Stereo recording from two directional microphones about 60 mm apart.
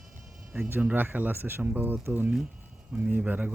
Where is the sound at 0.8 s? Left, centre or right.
Right.